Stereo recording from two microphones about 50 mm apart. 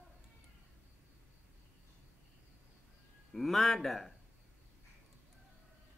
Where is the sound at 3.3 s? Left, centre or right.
Centre.